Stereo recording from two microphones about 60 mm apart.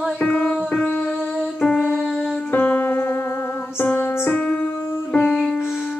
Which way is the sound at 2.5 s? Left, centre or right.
Left.